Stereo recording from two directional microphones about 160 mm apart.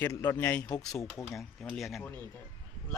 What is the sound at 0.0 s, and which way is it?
Speech, 15° left (ahead or behind).